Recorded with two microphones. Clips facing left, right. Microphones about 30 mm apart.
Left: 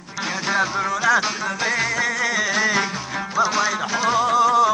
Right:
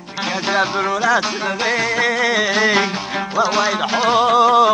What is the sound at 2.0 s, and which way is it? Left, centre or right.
Music, right.